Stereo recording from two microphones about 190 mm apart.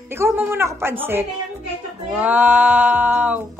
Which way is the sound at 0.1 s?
10° right (ahead or behind).